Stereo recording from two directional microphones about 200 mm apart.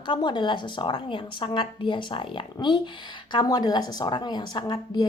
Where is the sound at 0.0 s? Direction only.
20° left (ahead or behind).